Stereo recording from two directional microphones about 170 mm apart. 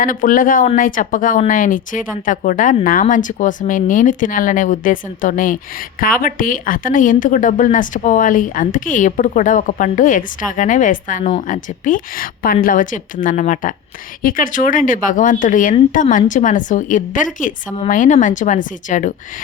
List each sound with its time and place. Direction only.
0.0 s a woman's voice: 55° left (ahead or behind)